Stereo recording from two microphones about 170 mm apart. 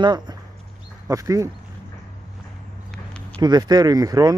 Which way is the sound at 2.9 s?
5° left (ahead or behind).